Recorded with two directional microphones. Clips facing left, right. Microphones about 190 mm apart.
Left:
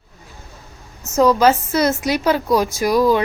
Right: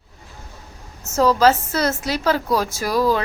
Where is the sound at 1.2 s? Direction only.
15° left (ahead or behind).